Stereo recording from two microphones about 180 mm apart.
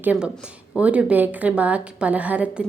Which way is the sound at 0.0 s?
10° right (ahead or behind).